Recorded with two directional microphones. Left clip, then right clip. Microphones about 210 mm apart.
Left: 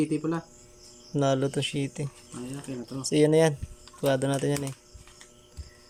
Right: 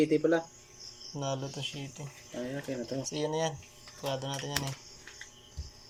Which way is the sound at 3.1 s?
45° left (ahead or behind).